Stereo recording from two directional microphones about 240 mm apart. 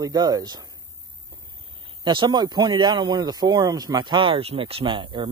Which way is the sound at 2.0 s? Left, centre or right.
Centre.